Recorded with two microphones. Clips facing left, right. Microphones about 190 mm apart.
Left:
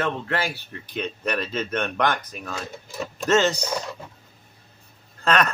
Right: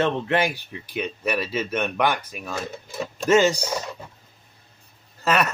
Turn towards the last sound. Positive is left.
turn(degrees=-5)  # may be behind; listen again after turning